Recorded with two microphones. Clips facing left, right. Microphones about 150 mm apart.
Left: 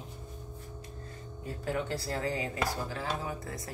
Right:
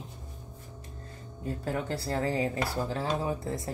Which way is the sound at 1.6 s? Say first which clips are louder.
Even; 30° right (ahead or behind).